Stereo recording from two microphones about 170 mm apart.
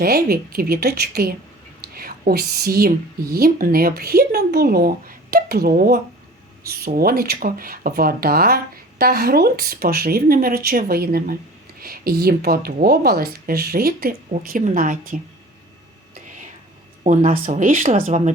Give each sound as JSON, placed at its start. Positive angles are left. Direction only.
{"t": 0.0, "sound": "a woman's voice", "side_deg": -65}
{"t": 14.3, "sound": "speech", "side_deg": -50}
{"t": 17.0, "sound": "speech", "side_deg": -45}